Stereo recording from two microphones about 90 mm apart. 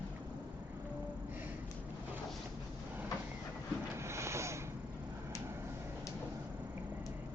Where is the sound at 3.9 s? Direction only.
30° right (ahead or behind).